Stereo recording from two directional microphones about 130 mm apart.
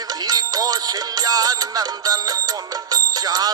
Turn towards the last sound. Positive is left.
turn(degrees=-30)  # may be behind; listen again after turning